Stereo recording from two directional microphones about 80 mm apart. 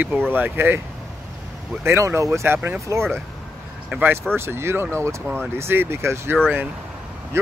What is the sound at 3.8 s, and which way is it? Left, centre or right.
Speech, right.